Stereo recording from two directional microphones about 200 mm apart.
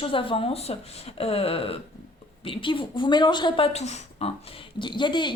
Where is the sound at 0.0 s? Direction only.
25° left (ahead or behind).